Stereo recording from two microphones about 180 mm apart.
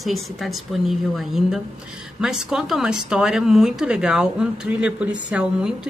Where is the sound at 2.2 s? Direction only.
5° right (ahead or behind).